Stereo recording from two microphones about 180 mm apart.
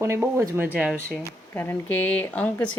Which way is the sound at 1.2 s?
10° left (ahead or behind).